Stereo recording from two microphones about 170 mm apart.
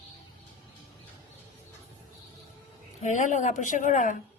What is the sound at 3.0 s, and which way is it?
Speech, 45° left (ahead or behind).